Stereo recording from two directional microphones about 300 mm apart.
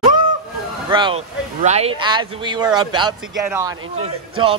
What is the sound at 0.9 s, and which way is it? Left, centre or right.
A man's voice, centre.